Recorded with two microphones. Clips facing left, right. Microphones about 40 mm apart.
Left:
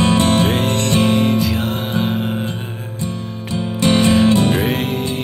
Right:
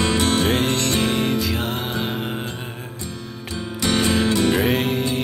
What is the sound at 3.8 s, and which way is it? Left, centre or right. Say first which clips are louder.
Music: left 6 dB; left.